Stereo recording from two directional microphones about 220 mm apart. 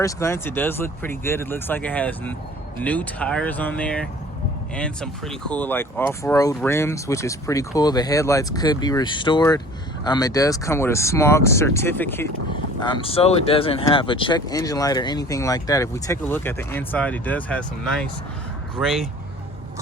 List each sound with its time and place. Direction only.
0.0 s speech: 15° left (ahead or behind)
12.8 s speech: 25° left (ahead or behind); by 18.9 s 5° right (ahead or behind)